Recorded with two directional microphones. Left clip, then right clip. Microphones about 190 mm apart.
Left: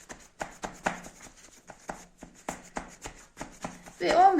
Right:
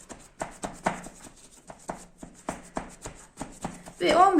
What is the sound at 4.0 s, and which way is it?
Clip-clop, 10° left (ahead or behind).